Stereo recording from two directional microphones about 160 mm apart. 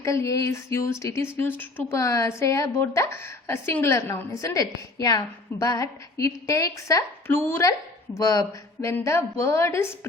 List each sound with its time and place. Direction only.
0.0 s a woman's voice: 20° left (ahead or behind)